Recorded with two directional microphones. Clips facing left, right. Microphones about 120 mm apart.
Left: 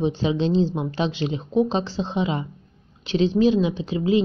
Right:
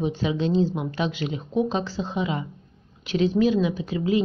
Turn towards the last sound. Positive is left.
turn(degrees=25)  # may be behind; listen again after turning